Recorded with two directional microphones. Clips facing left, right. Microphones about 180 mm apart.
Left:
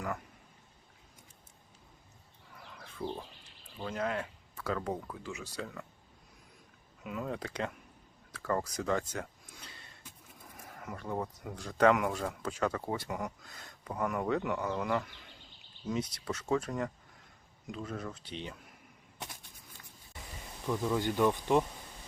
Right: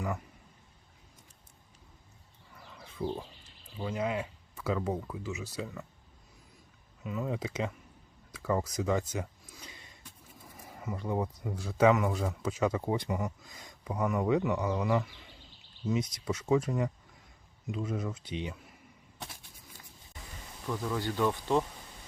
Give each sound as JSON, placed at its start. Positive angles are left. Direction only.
{"t": 2.6, "sound": "a sound", "side_deg": -5}
{"t": 3.8, "sound": "speech", "side_deg": -10}
{"t": 7.0, "sound": "speech", "side_deg": 0}
{"t": 8.3, "sound": "a sound", "side_deg": -10}
{"t": 10.5, "sound": "speech", "side_deg": -10}
{"t": 20.7, "sound": "speech", "side_deg": 15}